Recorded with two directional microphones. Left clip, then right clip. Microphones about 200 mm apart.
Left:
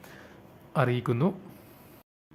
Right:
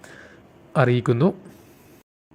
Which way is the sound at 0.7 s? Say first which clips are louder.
Right 8 dB; 20° right (ahead or behind).